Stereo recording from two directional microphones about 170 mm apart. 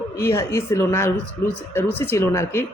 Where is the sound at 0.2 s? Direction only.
15° left (ahead or behind).